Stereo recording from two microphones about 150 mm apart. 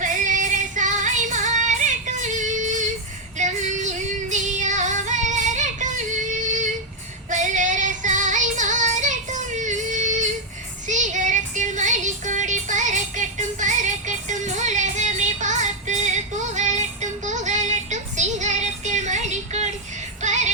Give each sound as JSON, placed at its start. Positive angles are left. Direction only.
{"t": 0.0, "sound": "music", "side_deg": -60}
{"t": 3.3, "sound": "female singing", "side_deg": -55}
{"t": 7.3, "sound": "music", "side_deg": -55}